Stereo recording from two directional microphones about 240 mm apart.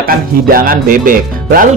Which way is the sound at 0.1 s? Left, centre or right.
Right.